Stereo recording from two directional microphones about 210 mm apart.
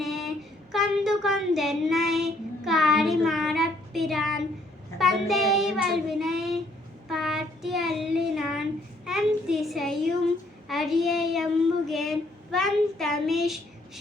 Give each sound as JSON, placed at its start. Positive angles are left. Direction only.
{"t": 0.0, "sound": "a sound", "side_deg": 0}
{"t": 4.9, "sound": "child singing", "side_deg": 0}
{"t": 11.9, "sound": "speech", "side_deg": 0}